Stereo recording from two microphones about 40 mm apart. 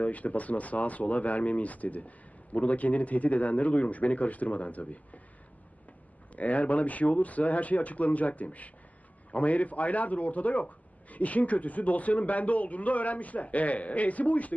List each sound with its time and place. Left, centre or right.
0.0 s speech: left
6.3 s speech: left